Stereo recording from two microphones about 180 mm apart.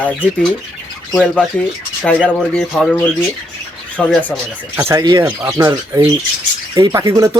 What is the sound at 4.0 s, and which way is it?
Speech, 5° left (ahead or behind).